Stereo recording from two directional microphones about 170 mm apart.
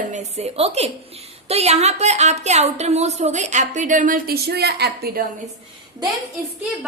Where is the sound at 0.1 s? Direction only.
40° right (ahead or behind); by 5.2 s 70° right (ahead or behind).